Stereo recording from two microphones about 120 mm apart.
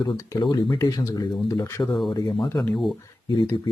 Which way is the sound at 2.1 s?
35° left (ahead or behind).